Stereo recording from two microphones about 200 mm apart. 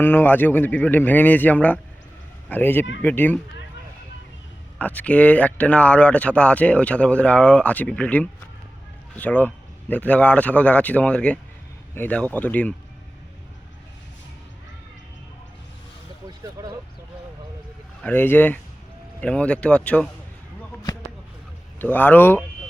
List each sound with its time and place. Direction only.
0.0 s speech: 10° left (ahead or behind)
4.8 s speech: 5° left (ahead or behind)
16.4 s speech: 20° right (ahead or behind)
18.0 s speech: 10° left (ahead or behind)
21.8 s speech: 10° left (ahead or behind)